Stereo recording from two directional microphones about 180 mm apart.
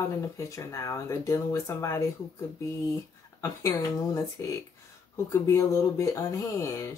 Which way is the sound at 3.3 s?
15° left (ahead or behind).